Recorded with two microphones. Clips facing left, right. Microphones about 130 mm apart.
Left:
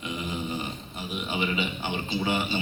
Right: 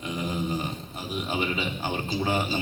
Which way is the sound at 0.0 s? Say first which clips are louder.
Right 3 dB; 40° right (ahead or behind).